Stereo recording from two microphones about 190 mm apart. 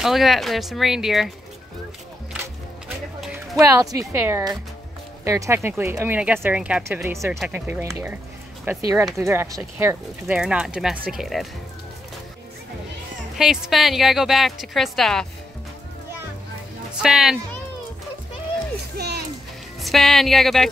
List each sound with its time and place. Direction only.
0.0 s a woman's voice: centre (ahead or behind)
3.5 s a woman's voice: 15° right (ahead or behind)
13.4 s a woman's voice: centre (ahead or behind)
17.0 s a woman's voice: 5° right (ahead or behind)
18.9 s music: 55° right (ahead or behind)
19.8 s a woman's voice: centre (ahead or behind)